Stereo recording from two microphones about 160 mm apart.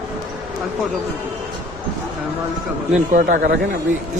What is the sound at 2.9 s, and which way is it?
Speech, 60° right (ahead or behind).